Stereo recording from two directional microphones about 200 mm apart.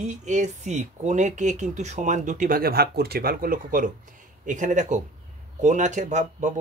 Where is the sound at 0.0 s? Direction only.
35° right (ahead or behind).